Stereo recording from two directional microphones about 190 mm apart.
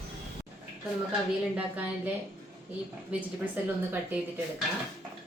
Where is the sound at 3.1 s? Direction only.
5° right (ahead or behind).